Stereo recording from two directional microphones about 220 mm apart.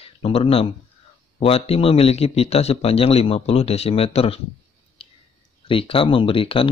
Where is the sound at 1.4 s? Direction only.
25° left (ahead or behind).